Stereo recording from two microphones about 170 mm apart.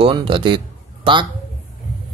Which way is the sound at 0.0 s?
30° right (ahead or behind).